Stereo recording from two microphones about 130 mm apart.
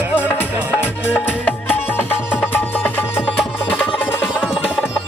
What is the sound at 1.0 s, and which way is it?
Music, 15° left (ahead or behind).